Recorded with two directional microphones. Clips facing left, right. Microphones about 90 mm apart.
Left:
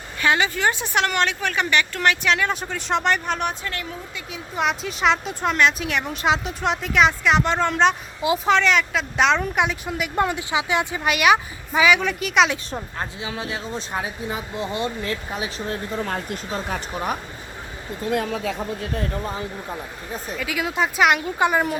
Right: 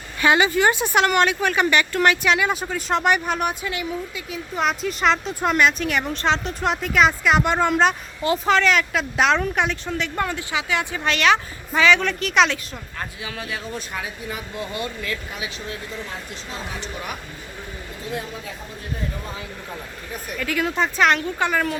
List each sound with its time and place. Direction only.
0.2 s speech: 10° right (ahead or behind); by 10.1 s 5° left (ahead or behind)
10.2 s a woman's voice: 20° left (ahead or behind)
12.7 s speech: 25° left (ahead or behind); by 17.2 s 40° left (ahead or behind)
18.1 s speech: 65° left (ahead or behind)
19.7 s speech: 25° left (ahead or behind)
20.4 s a woman's voice: 5° left (ahead or behind)